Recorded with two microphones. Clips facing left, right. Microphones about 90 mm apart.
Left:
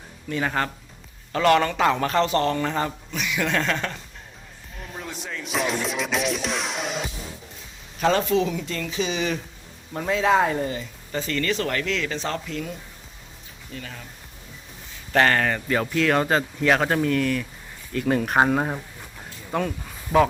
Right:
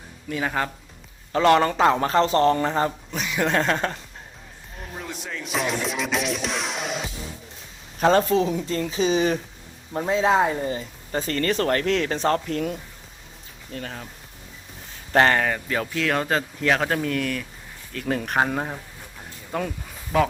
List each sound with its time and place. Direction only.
0.3 s speech: 5° right (ahead or behind)
1.3 s a man's voice: 25° right (ahead or behind)
4.9 s music: centre (ahead or behind)
8.0 s a man's voice: 35° right (ahead or behind)
13.7 s speech: 45° right (ahead or behind)
15.1 s speech: 25° right (ahead or behind)
15.4 s speech: 5° right (ahead or behind)